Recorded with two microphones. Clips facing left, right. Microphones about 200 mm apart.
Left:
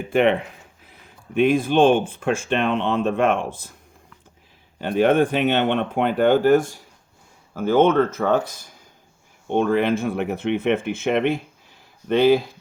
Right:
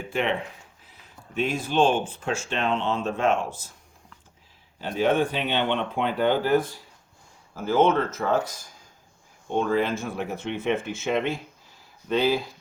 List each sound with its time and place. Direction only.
0.1 s speech: 60° left (ahead or behind)
4.8 s speech: 55° left (ahead or behind)
7.5 s speech: 60° left (ahead or behind)